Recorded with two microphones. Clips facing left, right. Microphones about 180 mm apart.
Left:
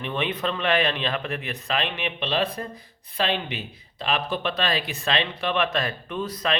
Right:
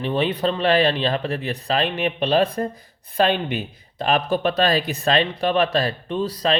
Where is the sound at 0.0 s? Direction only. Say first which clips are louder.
Right 6 dB; 35° right (ahead or behind).